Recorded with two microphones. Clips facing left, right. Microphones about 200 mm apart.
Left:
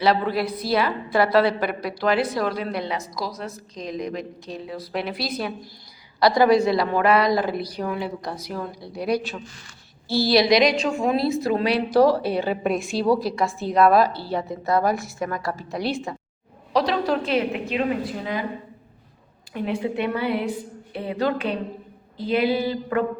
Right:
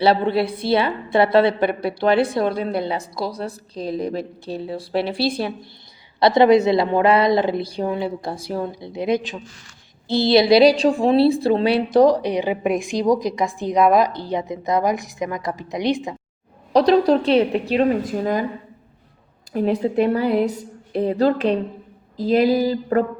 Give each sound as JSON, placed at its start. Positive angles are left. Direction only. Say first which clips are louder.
{"t": 0.0, "sound": "a woman's voice", "louder": "right 4 dB", "side_deg": -30}
{"t": 16.7, "sound": "a woman's voice", "louder": "right 7 dB", "side_deg": -35}
{"t": 19.5, "sound": "a woman's voice", "louder": "right 7 dB", "side_deg": -40}